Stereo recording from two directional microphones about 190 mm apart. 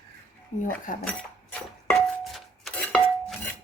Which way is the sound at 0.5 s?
40° left (ahead or behind).